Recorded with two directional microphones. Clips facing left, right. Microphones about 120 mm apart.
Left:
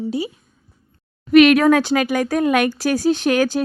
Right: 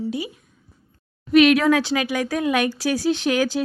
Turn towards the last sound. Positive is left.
turn(degrees=55)  # may be behind; listen again after turning